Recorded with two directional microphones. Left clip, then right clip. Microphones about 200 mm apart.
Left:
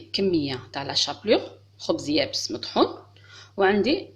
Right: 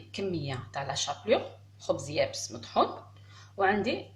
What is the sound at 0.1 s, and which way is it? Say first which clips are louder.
Speech: left 10 dB; 50° left (ahead or behind).